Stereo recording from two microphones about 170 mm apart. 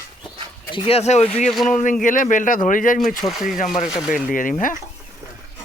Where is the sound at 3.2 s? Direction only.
Centre (ahead or behind).